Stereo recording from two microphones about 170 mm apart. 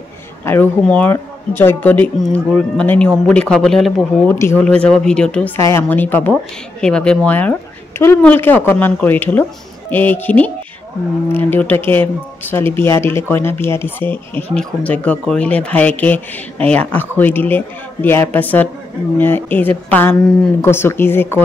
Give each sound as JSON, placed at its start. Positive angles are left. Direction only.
{"t": 0.5, "sound": "speech", "side_deg": 10}